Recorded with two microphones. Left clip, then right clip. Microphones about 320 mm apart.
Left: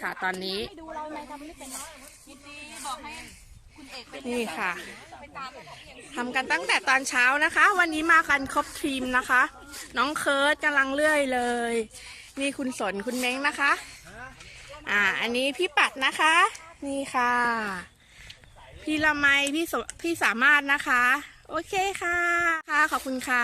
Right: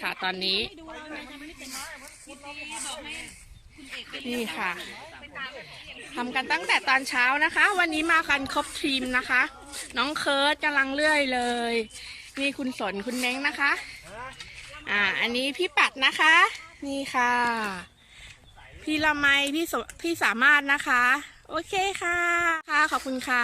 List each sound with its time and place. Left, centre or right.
0.0 s speech: centre
4.4 s speech: centre
14.8 s speech: centre
18.9 s speech: centre